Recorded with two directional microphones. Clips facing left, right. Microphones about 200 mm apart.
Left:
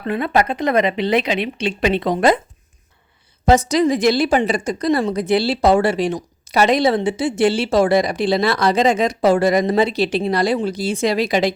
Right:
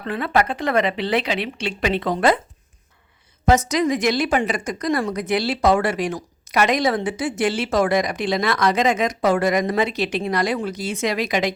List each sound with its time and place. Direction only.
0.1 s speech: 20° left (ahead or behind)
3.4 s a woman's voice: 30° left (ahead or behind)